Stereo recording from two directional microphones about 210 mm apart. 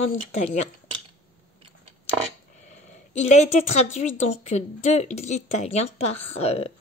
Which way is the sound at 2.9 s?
35° left (ahead or behind).